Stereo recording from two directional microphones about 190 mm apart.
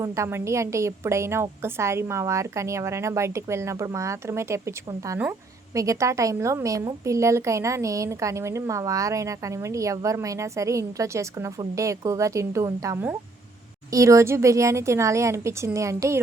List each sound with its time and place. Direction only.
0.0 s a woman's voice: 15° right (ahead or behind)